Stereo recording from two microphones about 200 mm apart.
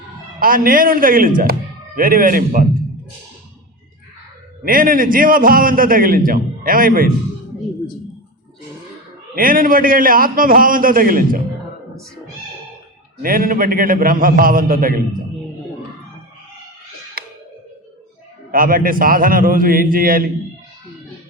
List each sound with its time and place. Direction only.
0.3 s a man's voice: 45° right (ahead or behind)
4.6 s a man's voice: 45° right (ahead or behind)
9.3 s a man's voice: 45° right (ahead or behind)
13.2 s a man's voice: 45° right (ahead or behind)
18.5 s a man's voice: 45° right (ahead or behind)